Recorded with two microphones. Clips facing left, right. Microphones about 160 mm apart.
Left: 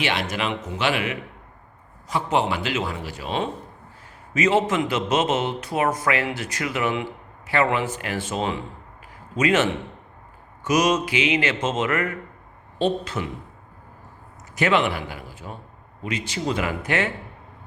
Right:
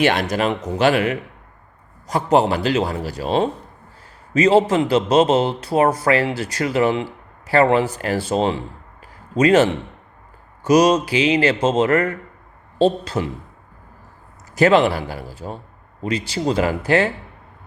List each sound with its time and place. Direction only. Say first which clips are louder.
0.0 s a man's voice: right 7 dB; 45° right (ahead or behind)
14.5 s a man's voice: right 7 dB; 35° right (ahead or behind)